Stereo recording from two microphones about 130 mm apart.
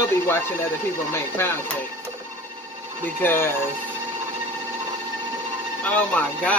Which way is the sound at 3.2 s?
15° left (ahead or behind).